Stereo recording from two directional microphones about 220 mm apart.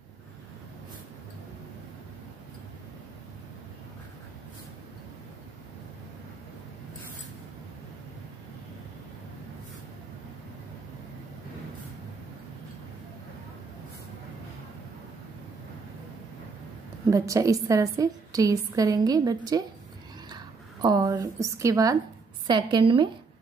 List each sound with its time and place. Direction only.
17.1 s a woman's voice: 15° right (ahead or behind)